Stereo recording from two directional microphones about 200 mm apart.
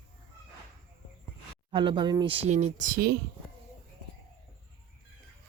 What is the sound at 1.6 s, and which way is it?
Speech, 25° right (ahead or behind).